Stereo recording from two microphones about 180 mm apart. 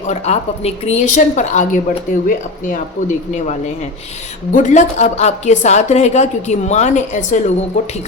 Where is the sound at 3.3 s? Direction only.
40° left (ahead or behind).